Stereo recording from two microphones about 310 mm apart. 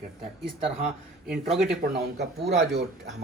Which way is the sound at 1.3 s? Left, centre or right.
Centre.